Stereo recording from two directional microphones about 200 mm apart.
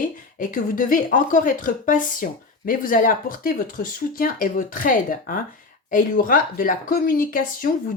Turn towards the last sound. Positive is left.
turn(degrees=45)  # may be behind; listen again after turning